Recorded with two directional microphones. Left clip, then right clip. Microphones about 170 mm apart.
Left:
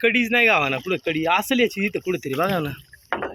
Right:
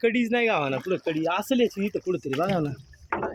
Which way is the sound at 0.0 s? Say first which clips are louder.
Left 5 dB; centre (ahead or behind).